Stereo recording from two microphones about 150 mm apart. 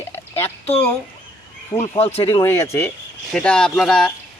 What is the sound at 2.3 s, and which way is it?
Speech, 20° left (ahead or behind).